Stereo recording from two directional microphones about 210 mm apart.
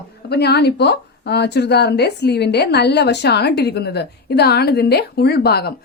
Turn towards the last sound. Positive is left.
turn(degrees=50)  # may be behind; listen again after turning